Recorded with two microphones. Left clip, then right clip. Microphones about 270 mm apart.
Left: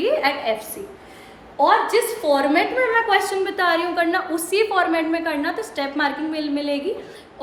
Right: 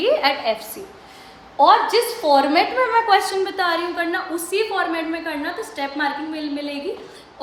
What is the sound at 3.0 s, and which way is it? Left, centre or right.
A woman's voice, centre.